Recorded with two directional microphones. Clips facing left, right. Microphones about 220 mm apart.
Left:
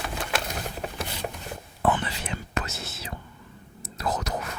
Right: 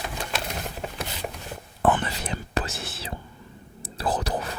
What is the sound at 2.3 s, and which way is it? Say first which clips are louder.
Whispering: right 3 dB; 30° right (ahead or behind).